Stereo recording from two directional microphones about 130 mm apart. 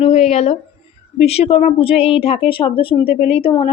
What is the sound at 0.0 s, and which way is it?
A woman's voice, 55° left (ahead or behind).